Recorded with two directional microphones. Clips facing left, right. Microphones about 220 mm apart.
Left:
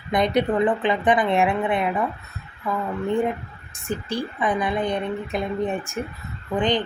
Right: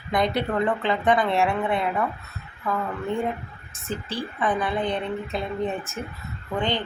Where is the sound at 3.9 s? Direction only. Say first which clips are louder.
Left 3 dB; 15° left (ahead or behind).